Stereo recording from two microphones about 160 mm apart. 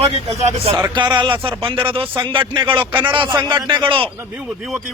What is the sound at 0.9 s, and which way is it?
A man's voice, 30° right (ahead or behind).